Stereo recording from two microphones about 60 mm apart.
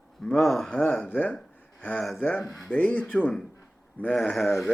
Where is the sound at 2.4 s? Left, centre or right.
Centre.